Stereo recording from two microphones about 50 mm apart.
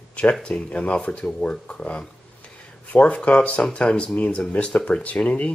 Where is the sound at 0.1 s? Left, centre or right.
Left.